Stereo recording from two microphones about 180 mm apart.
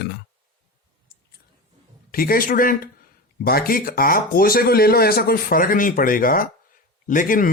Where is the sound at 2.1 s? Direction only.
55° left (ahead or behind).